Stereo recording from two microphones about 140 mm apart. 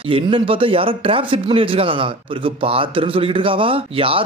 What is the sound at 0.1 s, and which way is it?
Speech, 40° right (ahead or behind).